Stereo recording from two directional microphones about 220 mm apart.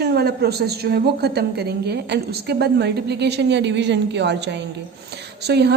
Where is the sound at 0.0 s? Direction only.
45° right (ahead or behind).